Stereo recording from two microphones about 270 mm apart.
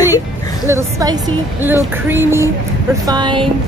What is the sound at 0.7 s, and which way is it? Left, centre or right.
Speech, centre.